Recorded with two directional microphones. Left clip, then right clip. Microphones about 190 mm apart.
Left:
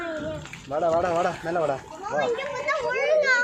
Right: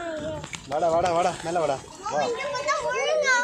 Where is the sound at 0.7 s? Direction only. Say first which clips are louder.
Right 1 dB; 35° left (ahead or behind).